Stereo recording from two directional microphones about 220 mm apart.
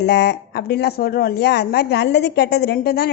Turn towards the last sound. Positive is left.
turn(degrees=45)  # may be behind; listen again after turning